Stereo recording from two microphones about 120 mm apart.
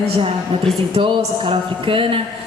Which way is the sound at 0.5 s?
45° right (ahead or behind).